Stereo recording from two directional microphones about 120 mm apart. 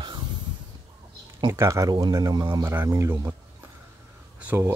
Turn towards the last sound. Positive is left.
turn(degrees=-20)  # may be behind; listen again after turning